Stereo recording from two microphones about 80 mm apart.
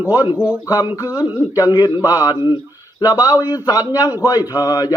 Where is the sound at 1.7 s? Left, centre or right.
Left.